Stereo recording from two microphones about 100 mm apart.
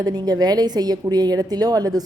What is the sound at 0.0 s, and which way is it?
A woman's voice, 40° right (ahead or behind).